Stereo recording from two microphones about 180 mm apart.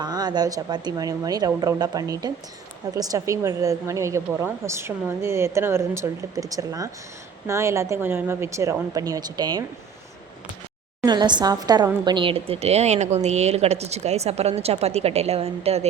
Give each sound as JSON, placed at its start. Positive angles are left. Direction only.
{"t": 0.0, "sound": "a woman's voice", "side_deg": -25}
{"t": 11.0, "sound": "a woman's voice", "side_deg": -25}